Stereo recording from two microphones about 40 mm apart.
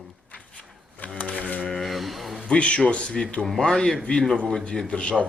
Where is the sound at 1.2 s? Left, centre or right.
Left.